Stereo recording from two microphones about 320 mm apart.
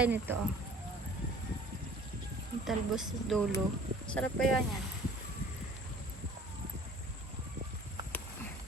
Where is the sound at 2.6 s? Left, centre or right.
Centre.